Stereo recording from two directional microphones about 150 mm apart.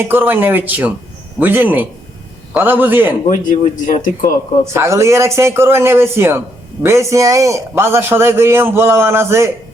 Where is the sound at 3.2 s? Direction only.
60° left (ahead or behind).